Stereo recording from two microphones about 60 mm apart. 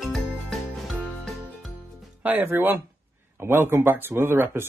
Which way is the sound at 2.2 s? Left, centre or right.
Right.